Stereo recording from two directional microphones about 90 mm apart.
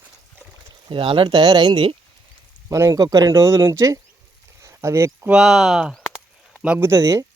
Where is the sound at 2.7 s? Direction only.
35° right (ahead or behind).